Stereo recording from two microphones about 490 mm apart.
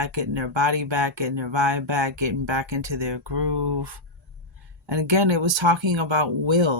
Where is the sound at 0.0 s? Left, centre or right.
Right.